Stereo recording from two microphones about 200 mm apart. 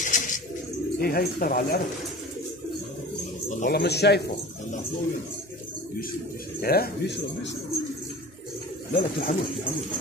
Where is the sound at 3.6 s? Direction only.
55° left (ahead or behind).